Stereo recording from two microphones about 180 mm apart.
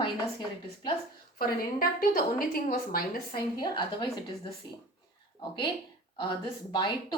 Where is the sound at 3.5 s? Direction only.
25° left (ahead or behind).